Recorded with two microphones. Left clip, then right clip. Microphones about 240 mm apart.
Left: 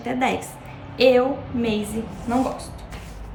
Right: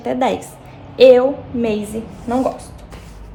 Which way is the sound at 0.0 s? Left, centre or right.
Centre.